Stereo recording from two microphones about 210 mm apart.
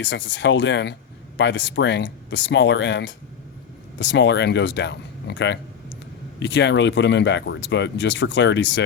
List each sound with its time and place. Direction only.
0.0 s speech: 60° left (ahead or behind)